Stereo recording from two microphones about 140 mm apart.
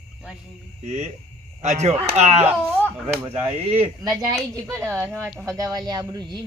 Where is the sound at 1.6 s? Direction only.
55° right (ahead or behind).